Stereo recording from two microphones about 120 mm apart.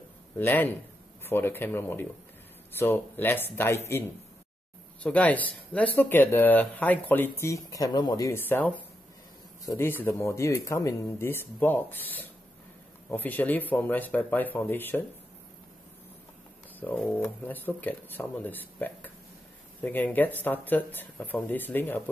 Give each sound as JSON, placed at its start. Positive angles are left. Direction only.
{"t": 0.4, "sound": "speech", "side_deg": 15}
{"t": 5.0, "sound": "speech", "side_deg": 10}
{"t": 8.3, "sound": "speech", "side_deg": 15}
{"t": 16.8, "sound": "speech", "side_deg": 15}